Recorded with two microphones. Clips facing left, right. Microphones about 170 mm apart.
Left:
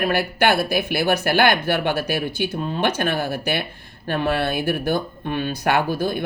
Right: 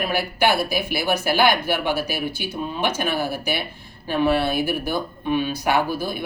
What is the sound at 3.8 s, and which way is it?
Speech, 60° left (ahead or behind).